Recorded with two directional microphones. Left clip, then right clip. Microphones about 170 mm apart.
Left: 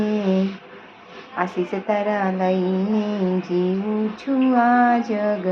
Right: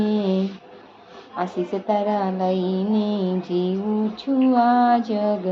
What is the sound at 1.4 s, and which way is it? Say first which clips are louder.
Female singing: left 2 dB; 10° right (ahead or behind).